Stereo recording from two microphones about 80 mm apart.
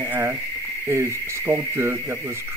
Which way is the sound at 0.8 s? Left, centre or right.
Right.